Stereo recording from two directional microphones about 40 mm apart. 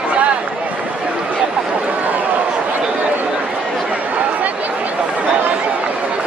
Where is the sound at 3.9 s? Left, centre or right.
Right.